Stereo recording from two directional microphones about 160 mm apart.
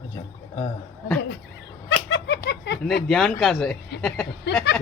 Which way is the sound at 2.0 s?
90° left.